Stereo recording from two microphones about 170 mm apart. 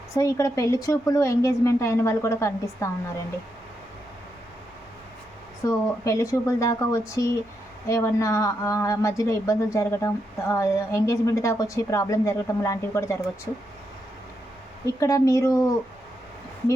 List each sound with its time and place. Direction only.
0.2 s a woman's voice: 20° left (ahead or behind)
5.6 s a woman's voice: 20° left (ahead or behind)
14.8 s a woman's voice: 20° left (ahead or behind)